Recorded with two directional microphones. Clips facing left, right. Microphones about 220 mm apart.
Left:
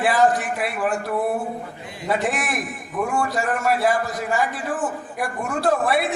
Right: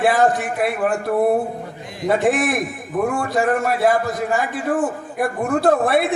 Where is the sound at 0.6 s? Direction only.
50° right (ahead or behind).